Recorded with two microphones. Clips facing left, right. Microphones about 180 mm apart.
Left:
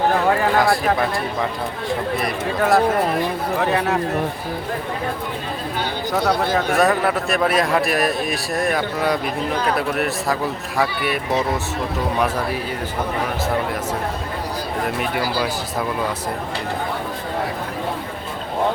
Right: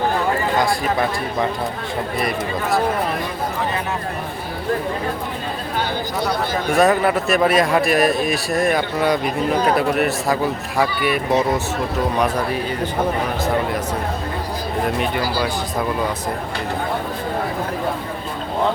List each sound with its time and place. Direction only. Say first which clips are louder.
3.7 s speech: left 5 dB; 70° left (ahead or behind)
6.7 s a man's voice: right 5 dB; centre (ahead or behind)